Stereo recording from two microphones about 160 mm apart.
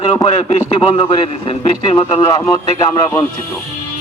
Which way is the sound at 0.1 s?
30° left (ahead or behind).